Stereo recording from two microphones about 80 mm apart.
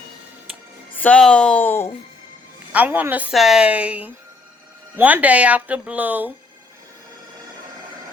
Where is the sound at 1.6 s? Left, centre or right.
Left.